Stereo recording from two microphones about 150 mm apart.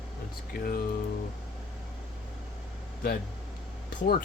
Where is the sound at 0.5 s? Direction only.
75° left (ahead or behind).